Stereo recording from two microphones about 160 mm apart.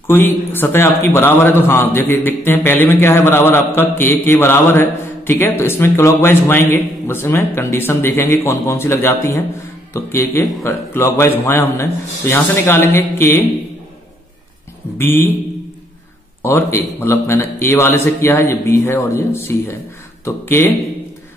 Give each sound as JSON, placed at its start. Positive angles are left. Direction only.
{"t": 0.0, "sound": "a man's voice", "side_deg": 15}
{"t": 15.0, "sound": "a man's voice", "side_deg": 15}
{"t": 16.4, "sound": "a man's voice", "side_deg": 15}